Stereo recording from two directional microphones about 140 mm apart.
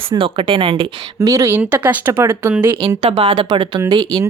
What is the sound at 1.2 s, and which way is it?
Speech, 25° right (ahead or behind).